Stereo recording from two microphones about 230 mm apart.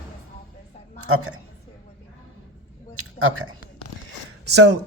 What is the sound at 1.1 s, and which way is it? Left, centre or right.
Speech, right.